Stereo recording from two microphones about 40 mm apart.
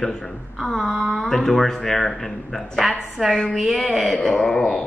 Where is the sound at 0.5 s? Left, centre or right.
Centre.